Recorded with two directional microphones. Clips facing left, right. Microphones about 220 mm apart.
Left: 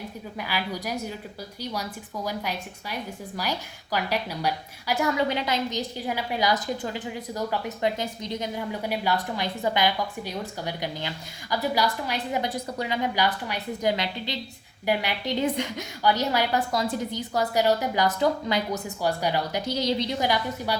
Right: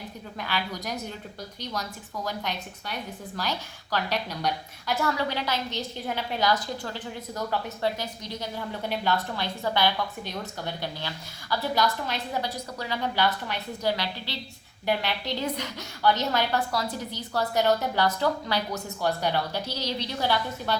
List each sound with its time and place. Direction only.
0.3 s a woman's voice: 10° left (ahead or behind)